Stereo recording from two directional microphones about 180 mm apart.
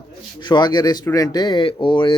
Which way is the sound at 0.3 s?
25° left (ahead or behind).